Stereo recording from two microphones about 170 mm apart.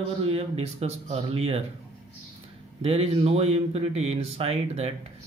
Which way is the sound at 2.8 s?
35° right (ahead or behind).